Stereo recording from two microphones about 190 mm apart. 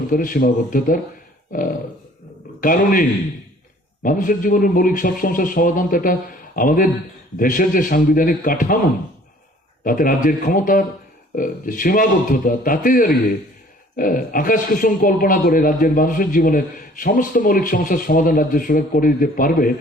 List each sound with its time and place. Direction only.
0.1 s speech: 45° left (ahead or behind)
9.8 s speech: 45° left (ahead or behind)